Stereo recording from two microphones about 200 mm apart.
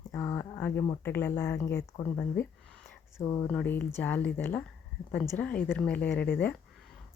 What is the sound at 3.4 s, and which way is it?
A woman's voice, 5° left (ahead or behind).